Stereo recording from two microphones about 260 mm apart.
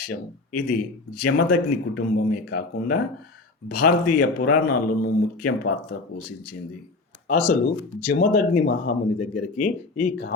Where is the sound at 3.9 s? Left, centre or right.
Left.